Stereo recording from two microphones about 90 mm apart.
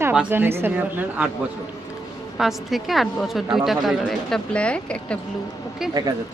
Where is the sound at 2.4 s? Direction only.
Centre (ahead or behind).